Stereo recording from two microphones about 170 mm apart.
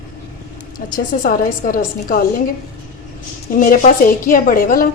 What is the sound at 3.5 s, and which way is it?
A woman's voice, 50° left (ahead or behind).